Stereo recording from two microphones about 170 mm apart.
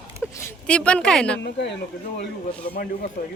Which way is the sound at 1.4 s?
85° left.